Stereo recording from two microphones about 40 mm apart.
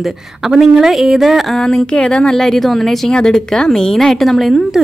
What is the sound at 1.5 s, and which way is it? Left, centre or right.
Speech, centre.